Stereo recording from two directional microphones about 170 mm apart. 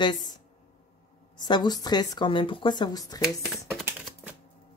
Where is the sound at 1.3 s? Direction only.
25° left (ahead or behind).